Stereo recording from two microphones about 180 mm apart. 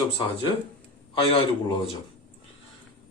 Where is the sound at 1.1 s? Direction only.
30° left (ahead or behind).